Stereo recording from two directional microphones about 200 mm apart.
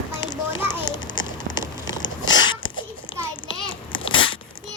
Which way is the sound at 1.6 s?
20° left (ahead or behind).